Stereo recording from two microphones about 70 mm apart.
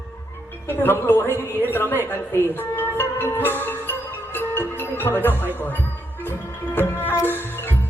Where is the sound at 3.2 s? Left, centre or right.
Left.